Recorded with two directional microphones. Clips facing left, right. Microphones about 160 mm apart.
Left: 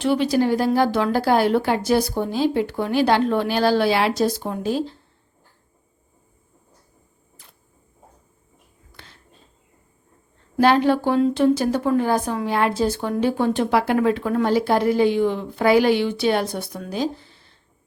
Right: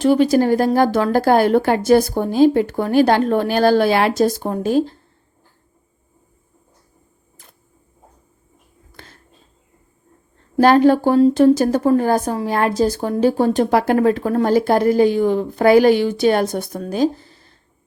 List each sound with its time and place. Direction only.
0.0 s a woman's voice: 45° right (ahead or behind)
8.9 s a sound: 45° right (ahead or behind)
10.6 s a woman's voice: 45° right (ahead or behind)